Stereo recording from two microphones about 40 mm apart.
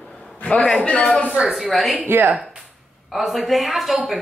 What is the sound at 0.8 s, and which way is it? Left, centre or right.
Speech, left.